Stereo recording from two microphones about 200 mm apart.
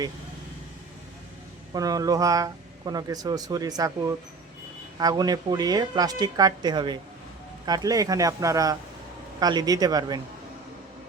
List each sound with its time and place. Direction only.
1.7 s a man's voice: 20° right (ahead or behind)